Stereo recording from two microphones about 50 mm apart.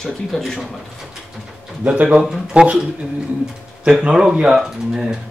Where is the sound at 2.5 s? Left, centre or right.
Right.